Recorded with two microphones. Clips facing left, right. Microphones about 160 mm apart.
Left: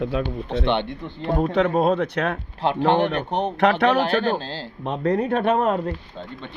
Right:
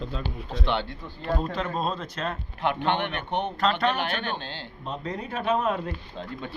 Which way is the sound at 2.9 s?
40° left (ahead or behind).